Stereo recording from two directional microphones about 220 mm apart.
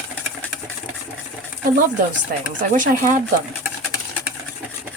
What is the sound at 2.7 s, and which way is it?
Speech, 35° right (ahead or behind).